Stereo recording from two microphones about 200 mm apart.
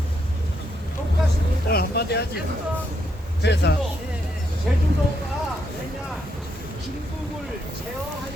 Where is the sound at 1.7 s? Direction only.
50° left (ahead or behind).